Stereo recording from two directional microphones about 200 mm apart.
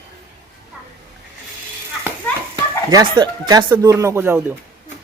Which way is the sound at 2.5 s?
20° right (ahead or behind).